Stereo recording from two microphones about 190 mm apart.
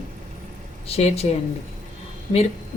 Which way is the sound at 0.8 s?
30° left (ahead or behind).